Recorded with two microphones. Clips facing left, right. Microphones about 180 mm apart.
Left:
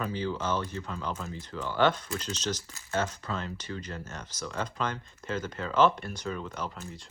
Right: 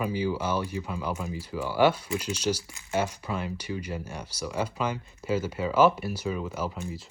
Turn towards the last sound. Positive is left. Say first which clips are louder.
# right 5 dB
turn(degrees=-5)  # may be behind; listen again after turning